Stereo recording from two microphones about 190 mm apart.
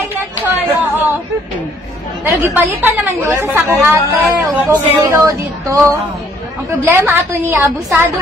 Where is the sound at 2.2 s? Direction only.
10° right (ahead or behind).